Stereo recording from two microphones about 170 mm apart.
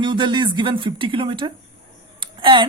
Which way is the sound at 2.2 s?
30° right (ahead or behind).